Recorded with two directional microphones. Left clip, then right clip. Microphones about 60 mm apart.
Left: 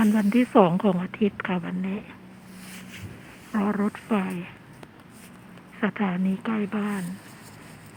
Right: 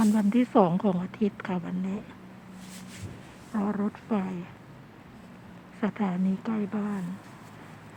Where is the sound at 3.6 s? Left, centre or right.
Left.